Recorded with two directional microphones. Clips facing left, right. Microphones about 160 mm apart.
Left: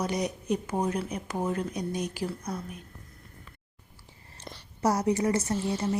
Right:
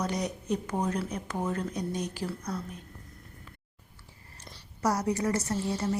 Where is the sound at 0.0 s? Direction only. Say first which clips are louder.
Left 2 dB; 15° left (ahead or behind).